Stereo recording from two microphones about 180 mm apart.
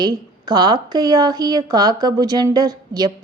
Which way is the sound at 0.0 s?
25° right (ahead or behind).